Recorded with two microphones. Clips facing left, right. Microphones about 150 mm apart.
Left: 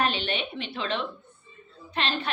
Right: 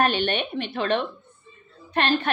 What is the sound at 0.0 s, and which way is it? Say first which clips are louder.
A woman's voice: right 5 dB; 50° right (ahead or behind).